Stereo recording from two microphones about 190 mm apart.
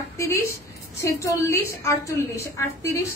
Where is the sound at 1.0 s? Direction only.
15° left (ahead or behind).